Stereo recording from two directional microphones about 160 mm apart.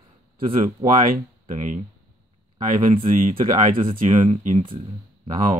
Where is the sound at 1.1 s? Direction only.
50° right (ahead or behind).